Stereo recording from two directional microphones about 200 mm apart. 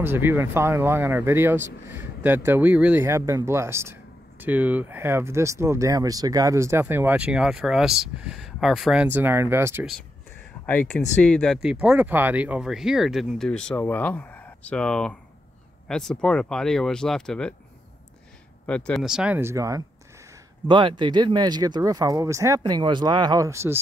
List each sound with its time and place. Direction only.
0.0 s speech: 10° right (ahead or behind)
10.7 s speech: 10° left (ahead or behind)
18.7 s speech: 5° left (ahead or behind); by 23.8 s 15° right (ahead or behind)